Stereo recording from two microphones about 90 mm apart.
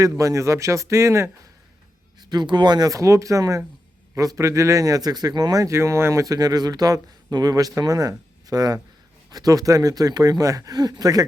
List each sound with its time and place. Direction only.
0.0 s speech: 40° right (ahead or behind)
2.3 s a man's voice: 55° right (ahead or behind)